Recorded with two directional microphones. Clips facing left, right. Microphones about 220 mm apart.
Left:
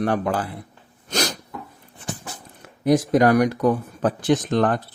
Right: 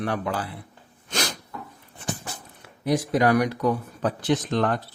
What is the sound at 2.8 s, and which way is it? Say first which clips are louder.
A man's voice: left 5 dB; 45° left (ahead or behind).